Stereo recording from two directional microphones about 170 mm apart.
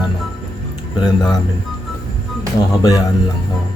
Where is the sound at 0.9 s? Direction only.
25° left (ahead or behind).